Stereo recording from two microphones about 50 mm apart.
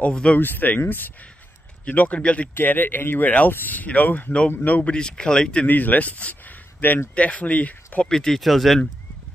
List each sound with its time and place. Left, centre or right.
0.1 s speech: left
0.4 s speech: left
1.9 s speech: left
2.5 s speech: left
4.9 s speech: centre
5.7 s speech: left
8.1 s speech: centre